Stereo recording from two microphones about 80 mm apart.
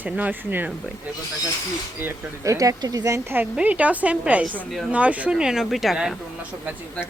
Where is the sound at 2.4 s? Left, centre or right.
Right.